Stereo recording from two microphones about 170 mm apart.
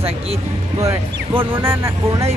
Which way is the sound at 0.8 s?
10° right (ahead or behind).